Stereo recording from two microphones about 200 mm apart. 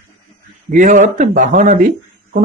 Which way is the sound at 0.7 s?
40° right (ahead or behind).